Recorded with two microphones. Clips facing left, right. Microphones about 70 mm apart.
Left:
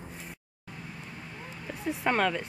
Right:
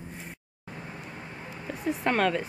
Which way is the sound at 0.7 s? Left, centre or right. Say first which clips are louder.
Right 3 dB; right.